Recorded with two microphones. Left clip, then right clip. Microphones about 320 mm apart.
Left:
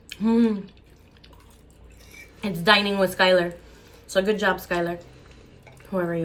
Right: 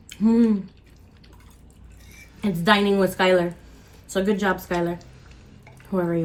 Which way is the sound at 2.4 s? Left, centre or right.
Centre.